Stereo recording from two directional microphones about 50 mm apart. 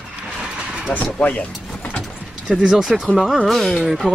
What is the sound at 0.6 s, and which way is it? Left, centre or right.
Vehicle, right.